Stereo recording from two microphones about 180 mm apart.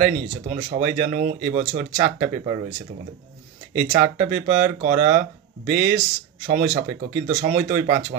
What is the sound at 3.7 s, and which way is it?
Speech, 45° right (ahead or behind).